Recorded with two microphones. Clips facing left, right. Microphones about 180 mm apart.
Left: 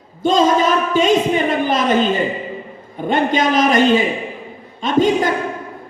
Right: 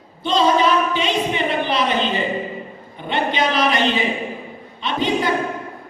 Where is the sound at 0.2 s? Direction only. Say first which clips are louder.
Left 3 dB; 45° left (ahead or behind).